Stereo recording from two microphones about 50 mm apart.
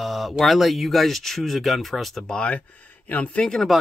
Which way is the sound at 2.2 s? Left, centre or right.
Centre.